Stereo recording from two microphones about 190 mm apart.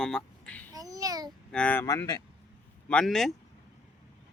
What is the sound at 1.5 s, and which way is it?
Speech, 10° left (ahead or behind).